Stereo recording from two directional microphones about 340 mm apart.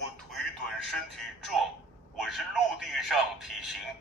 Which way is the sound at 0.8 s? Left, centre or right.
Centre.